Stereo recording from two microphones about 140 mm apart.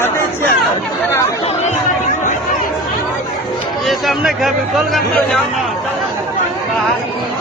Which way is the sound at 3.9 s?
Centre (ahead or behind).